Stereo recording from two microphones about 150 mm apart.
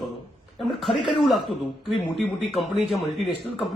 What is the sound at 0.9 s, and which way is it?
Speech, 30° left (ahead or behind).